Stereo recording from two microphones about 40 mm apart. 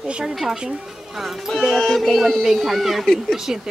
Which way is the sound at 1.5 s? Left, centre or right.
Centre.